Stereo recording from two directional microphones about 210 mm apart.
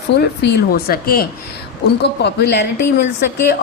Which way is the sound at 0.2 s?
45° left (ahead or behind).